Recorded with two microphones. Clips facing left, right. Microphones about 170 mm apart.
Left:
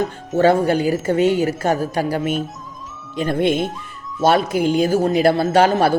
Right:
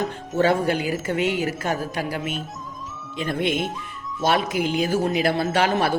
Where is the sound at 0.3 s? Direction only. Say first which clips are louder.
Left 5 dB; 35° left (ahead or behind).